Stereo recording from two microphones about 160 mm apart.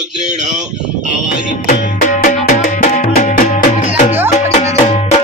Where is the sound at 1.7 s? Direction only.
65° left (ahead or behind).